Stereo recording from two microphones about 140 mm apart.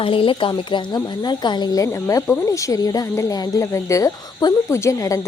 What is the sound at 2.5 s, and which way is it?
Insect, 25° left (ahead or behind).